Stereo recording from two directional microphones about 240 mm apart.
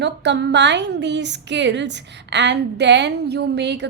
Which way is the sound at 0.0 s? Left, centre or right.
Right.